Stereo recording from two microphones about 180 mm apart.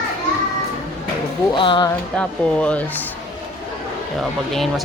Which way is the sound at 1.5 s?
25° left (ahead or behind).